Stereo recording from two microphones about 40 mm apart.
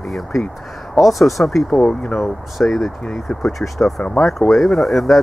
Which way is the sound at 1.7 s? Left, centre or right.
Left.